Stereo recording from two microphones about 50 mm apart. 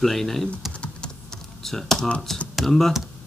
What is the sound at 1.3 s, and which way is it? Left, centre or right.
Typing, centre.